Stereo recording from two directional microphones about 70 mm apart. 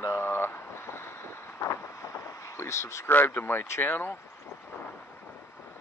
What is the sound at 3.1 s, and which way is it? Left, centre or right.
Speech, left.